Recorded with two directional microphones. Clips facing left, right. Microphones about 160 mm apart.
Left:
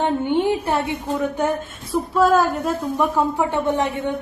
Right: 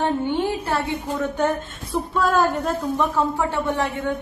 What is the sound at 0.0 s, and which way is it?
Speech, 20° left (ahead or behind).